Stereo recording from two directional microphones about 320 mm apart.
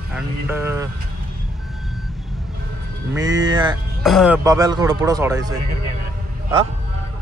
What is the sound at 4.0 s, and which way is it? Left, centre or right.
Speech, centre.